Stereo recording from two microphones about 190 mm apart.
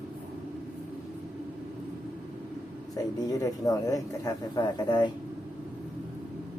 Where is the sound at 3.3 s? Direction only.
20° left (ahead or behind).